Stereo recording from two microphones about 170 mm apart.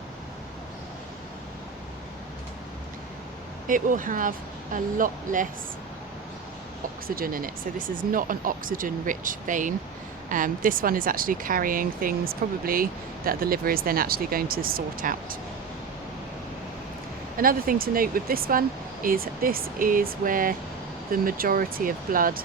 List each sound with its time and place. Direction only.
3.7 s speech: 50° right (ahead or behind)
7.2 s speech: 55° right (ahead or behind)
17.3 s speech: 55° right (ahead or behind)